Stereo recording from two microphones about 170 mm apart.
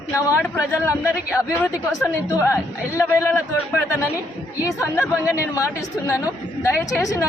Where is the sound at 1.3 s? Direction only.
15° left (ahead or behind).